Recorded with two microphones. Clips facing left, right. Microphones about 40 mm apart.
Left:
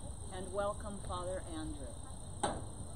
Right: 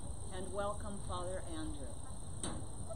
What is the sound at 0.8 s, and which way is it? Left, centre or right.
Speech, centre.